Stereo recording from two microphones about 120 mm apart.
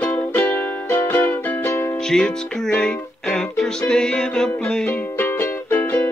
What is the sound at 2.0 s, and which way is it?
Music, 5° left (ahead or behind).